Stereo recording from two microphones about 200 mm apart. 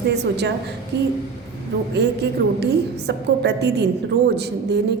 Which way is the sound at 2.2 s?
55° right (ahead or behind).